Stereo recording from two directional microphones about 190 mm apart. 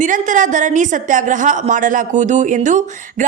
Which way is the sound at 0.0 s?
40° right (ahead or behind).